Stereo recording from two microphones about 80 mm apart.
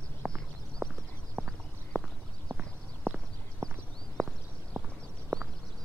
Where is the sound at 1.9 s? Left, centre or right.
Centre.